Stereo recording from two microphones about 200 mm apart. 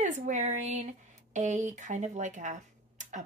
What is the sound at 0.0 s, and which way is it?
A woman's voice, 35° right (ahead or behind).